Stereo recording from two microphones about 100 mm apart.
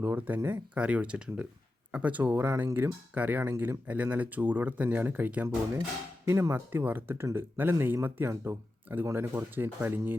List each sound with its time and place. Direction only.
0.0 s speech: 20° right (ahead or behind)